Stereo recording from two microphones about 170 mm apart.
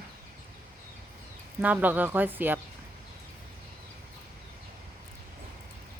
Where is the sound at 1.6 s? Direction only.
10° right (ahead or behind).